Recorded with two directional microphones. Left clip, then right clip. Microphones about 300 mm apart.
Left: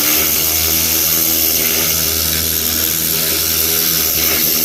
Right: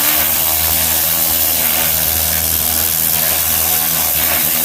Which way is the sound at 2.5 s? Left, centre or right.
Centre.